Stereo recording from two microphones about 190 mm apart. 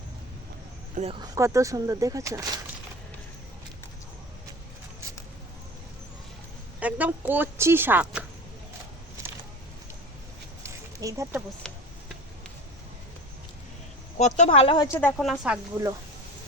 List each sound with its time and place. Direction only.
0.9 s speech: 30° right (ahead or behind)
1.4 s speech: 15° right (ahead or behind)
6.7 s speech: 10° right (ahead or behind)
10.6 s a sound: 15° right (ahead or behind)
11.6 s a sound: centre (ahead or behind)
14.2 s speech: 40° left (ahead or behind)
15.0 s a woman's voice: centre (ahead or behind)